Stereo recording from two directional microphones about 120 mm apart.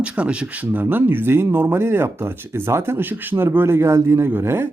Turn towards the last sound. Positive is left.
turn(degrees=-20)  # may be behind; listen again after turning